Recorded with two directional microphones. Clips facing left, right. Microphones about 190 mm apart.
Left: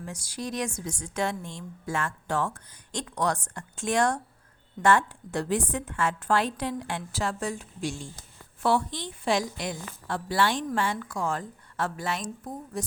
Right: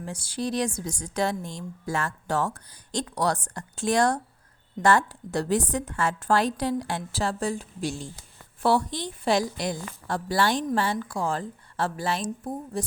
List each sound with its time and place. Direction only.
0.0 s a woman's voice: 30° right (ahead or behind)